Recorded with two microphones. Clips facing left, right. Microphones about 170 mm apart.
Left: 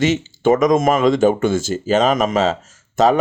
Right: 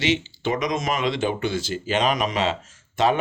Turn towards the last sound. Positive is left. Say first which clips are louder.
# left 6 dB
turn(degrees=40)  # may be behind; listen again after turning